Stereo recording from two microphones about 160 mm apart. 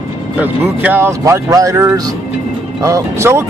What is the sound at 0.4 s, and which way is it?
Speech, 10° right (ahead or behind).